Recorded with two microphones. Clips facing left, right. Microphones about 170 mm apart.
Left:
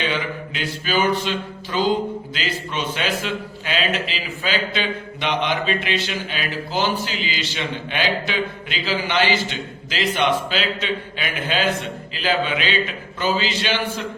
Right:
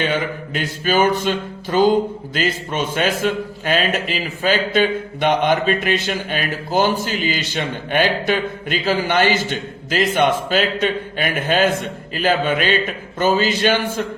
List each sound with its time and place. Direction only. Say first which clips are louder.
0.0 s a man's voice: right 4 dB; 50° right (ahead or behind)